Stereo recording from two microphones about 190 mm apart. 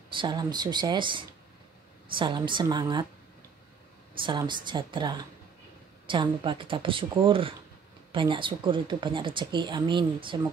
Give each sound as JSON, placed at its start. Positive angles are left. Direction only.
{"t": 0.1, "sound": "speech", "side_deg": -25}
{"t": 4.2, "sound": "speech", "side_deg": -25}